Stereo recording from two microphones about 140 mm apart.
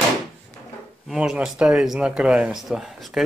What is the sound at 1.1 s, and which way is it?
Speech, 5° right (ahead or behind).